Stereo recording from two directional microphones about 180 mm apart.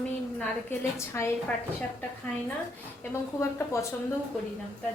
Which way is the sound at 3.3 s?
15° left (ahead or behind).